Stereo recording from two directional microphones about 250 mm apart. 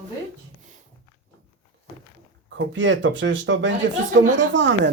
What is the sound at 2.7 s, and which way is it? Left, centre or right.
Speech, right.